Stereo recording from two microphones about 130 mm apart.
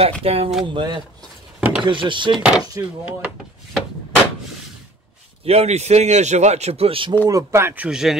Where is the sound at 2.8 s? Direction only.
25° right (ahead or behind).